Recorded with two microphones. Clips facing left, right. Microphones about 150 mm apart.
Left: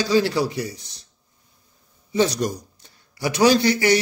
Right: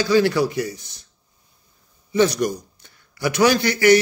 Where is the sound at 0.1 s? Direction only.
30° left (ahead or behind).